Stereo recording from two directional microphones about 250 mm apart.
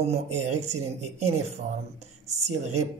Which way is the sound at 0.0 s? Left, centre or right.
Right.